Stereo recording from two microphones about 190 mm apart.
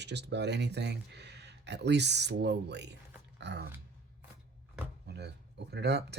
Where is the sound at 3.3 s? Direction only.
65° right (ahead or behind).